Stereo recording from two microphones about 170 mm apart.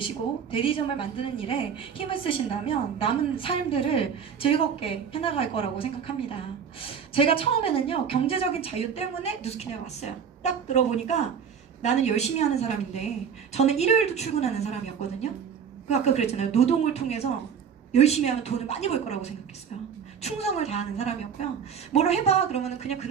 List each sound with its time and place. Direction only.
0.5 s a woman's voice: 30° left (ahead or behind)
15.9 s a woman's voice: 40° left (ahead or behind)